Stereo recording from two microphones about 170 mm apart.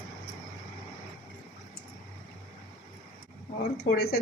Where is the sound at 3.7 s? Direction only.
65° left (ahead or behind).